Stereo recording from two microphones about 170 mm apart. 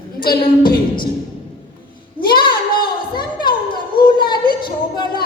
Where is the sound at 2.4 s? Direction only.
25° left (ahead or behind).